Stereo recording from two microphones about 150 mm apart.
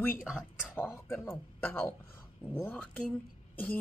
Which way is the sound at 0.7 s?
15° left (ahead or behind).